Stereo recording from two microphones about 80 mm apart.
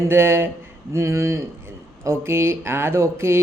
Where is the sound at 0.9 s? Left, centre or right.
Right.